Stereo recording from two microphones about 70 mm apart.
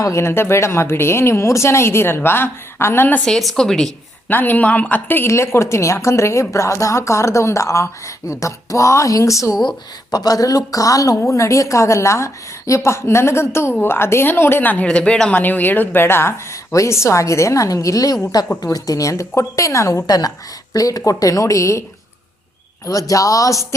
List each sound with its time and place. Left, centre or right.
0.0 s speech: left
3.2 s speech: centre
4.3 s speech: left
5.3 s a woman's voice: left
10.1 s a woman's voice: left
14.8 s a woman's voice: centre; by 20.1 s left
20.1 s speech: left
22.9 s a woman's voice: left